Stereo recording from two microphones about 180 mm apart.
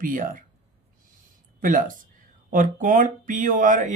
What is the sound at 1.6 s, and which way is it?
Speech, 50° right (ahead or behind).